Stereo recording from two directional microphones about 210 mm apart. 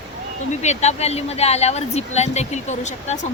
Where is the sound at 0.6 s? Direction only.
30° left (ahead or behind).